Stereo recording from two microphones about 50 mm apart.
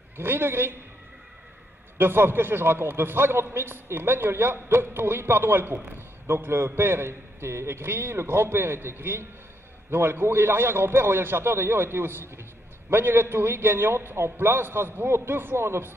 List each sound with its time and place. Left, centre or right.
0.2 s a man's voice: right
2.0 s a man's voice: right